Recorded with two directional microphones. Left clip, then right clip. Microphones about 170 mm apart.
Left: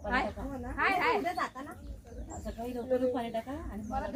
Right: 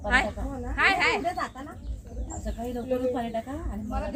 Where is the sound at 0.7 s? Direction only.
25° right (ahead or behind).